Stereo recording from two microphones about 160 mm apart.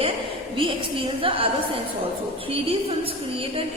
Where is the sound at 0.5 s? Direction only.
35° right (ahead or behind).